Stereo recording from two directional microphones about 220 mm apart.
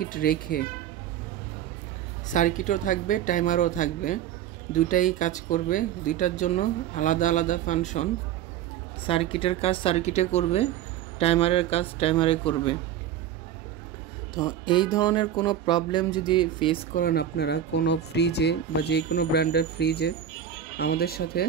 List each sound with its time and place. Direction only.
0.0 s speech: 40° left (ahead or behind)
2.3 s speech: 35° left (ahead or behind)
9.0 s music: 25° left (ahead or behind)
14.3 s music: 20° left (ahead or behind)
16.9 s speech: 45° left (ahead or behind)